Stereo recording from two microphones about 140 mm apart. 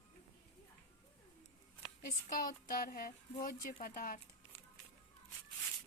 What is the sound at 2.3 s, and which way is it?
Child singing, 80° left.